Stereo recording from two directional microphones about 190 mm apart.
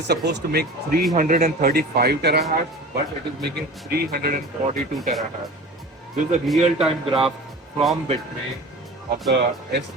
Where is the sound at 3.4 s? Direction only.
55° right (ahead or behind).